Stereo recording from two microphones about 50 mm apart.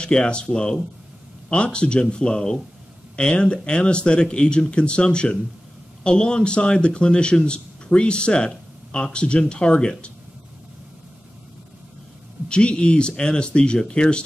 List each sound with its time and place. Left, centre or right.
0.0 s a man's voice: centre
12.4 s a man's voice: centre